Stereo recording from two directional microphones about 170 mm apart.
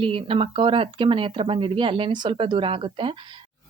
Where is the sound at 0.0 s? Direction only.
30° right (ahead or behind).